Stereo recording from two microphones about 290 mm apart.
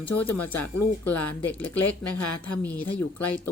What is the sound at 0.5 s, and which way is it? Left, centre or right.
Speech, left.